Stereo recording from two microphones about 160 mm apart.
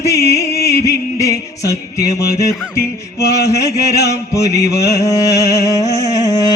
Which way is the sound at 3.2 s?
20° left (ahead or behind).